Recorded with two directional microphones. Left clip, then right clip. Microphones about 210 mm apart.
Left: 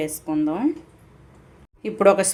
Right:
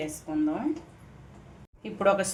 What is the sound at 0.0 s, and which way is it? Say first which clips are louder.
Speech: left 6 dB; 45° left (ahead or behind).